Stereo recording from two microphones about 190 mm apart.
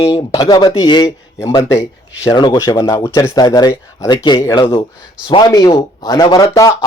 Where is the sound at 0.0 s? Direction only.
25° left (ahead or behind).